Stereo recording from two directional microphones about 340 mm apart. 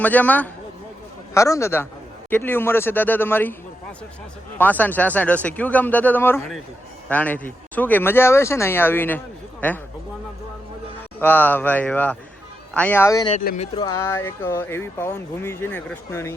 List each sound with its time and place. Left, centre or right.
0.0 s speech: centre
4.5 s speech: centre
11.2 s speech: centre
13.4 s speech: left
13.7 s speech: centre